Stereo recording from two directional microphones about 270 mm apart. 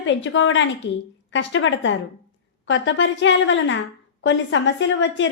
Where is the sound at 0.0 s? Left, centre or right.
Left.